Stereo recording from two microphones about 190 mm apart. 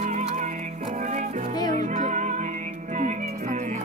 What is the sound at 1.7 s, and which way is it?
Music, 40° right (ahead or behind).